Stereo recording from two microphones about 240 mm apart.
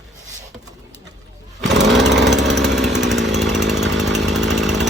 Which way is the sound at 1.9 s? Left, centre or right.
Centre.